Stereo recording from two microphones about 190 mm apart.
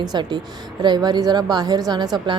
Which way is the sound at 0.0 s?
20° right (ahead or behind).